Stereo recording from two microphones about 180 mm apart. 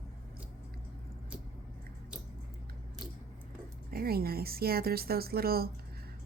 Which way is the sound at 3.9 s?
55° right (ahead or behind).